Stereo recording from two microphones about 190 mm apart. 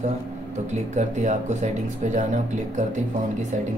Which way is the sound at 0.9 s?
40° right (ahead or behind).